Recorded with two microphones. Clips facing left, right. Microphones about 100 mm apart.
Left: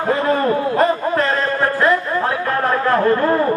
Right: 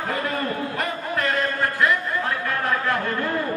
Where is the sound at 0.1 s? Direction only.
30° left (ahead or behind).